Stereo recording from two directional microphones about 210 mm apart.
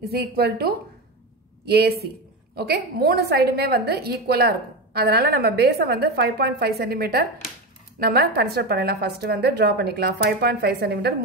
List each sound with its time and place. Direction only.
0.1 s a woman's voice: 50° right (ahead or behind)